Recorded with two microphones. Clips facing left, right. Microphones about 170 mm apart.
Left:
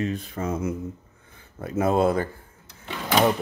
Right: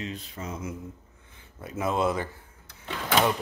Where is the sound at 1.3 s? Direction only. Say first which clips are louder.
Left 8 dB; 40° left (ahead or behind).